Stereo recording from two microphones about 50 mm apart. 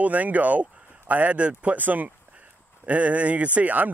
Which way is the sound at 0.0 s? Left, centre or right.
Right.